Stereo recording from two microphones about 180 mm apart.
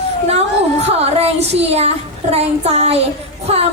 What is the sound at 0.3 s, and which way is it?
A woman's voice, 35° right (ahead or behind).